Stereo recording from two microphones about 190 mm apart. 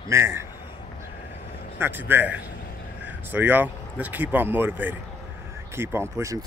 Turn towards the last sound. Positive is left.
turn(degrees=-15)  # may be behind; listen again after turning